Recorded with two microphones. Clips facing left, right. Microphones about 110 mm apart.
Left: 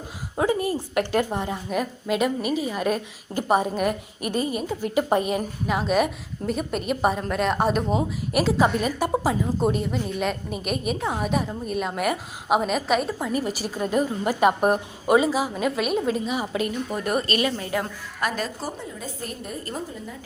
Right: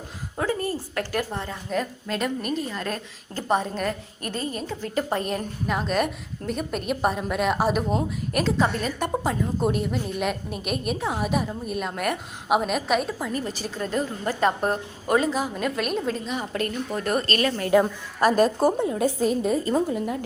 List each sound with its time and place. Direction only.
0.3 s a woman's voice: 15° left (ahead or behind)
18.2 s a woman's voice: 40° right (ahead or behind)
18.9 s a woman's voice: 75° right (ahead or behind)